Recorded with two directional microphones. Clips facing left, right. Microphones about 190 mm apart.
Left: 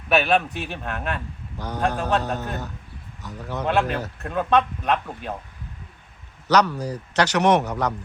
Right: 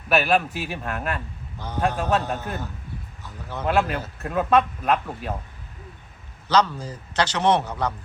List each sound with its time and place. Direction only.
0.1 s speech: centre (ahead or behind)
1.5 s a man's voice: 15° left (ahead or behind)
2.0 s speech: 5° right (ahead or behind)
3.2 s a man's voice: 15° left (ahead or behind)
3.7 s speech: centre (ahead or behind)
6.5 s a man's voice: 15° left (ahead or behind)